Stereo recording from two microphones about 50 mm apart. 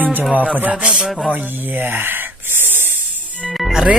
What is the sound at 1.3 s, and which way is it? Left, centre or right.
Speech, right.